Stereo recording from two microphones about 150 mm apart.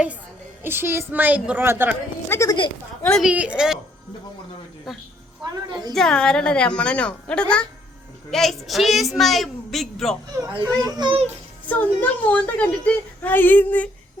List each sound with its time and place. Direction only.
0.6 s a woman's voice: 15° right (ahead or behind)
2.3 s a woman's voice: 20° left (ahead or behind)
3.0 s a woman's voice: 5° left (ahead or behind)
3.2 s a woman's voice: 5° right (ahead or behind)
5.9 s a woman's voice: 5° left (ahead or behind)
10.8 s a child's voice: 25° right (ahead or behind)
11.7 s speech: 10° left (ahead or behind)